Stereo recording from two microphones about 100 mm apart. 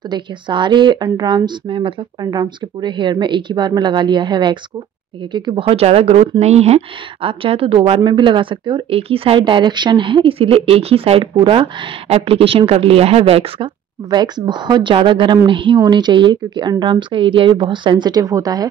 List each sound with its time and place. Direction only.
0.1 s speech: 50° right (ahead or behind)
2.2 s speech: 45° right (ahead or behind)
5.6 s speech: 80° right; by 8.8 s 55° right (ahead or behind)
8.9 s speech: 70° right (ahead or behind)
9.4 s speech: 50° right (ahead or behind); by 13.7 s 70° right (ahead or behind)
14.1 s speech: 45° right (ahead or behind)